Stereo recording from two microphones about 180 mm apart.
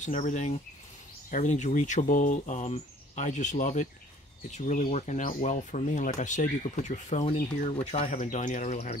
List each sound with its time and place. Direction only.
0.0 s speech: 40° left (ahead or behind)